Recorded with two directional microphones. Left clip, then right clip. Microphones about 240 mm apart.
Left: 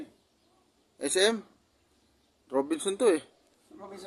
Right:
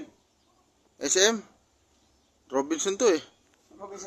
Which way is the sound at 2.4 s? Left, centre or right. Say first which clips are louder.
Right 2 dB; centre.